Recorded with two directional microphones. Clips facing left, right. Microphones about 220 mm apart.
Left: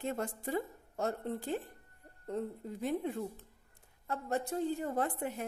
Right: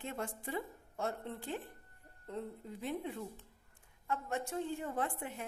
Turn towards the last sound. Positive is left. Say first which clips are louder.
# left 4 dB
turn(degrees=40)  # may be behind; listen again after turning